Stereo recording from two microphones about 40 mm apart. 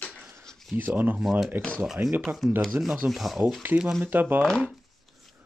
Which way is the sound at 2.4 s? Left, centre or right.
Centre.